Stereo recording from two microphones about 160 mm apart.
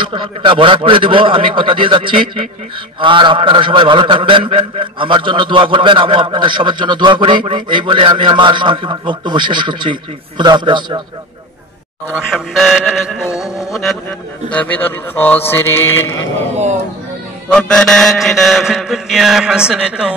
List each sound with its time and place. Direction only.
0.0 s a man's voice: 30° right (ahead or behind)
12.1 s mantra: centre (ahead or behind)
13.3 s a sound: 20° left (ahead or behind)
13.7 s mantra: centre (ahead or behind)
14.5 s speech: 10° left (ahead or behind)
16.3 s speech: 45° right (ahead or behind)
17.5 s mantra: 5° left (ahead or behind)